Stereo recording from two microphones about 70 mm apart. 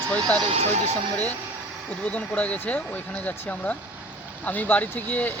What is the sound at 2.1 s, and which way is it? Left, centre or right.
Speech, left.